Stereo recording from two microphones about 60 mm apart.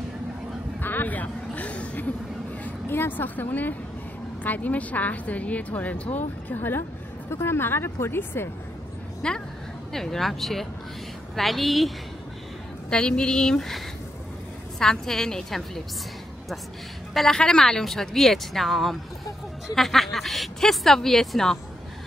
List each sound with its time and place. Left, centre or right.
0.7 s a sound: left
2.9 s a woman's voice: left
9.2 s a woman's voice: centre
9.9 s speech: centre
12.9 s a woman's voice: centre
17.1 s speech: centre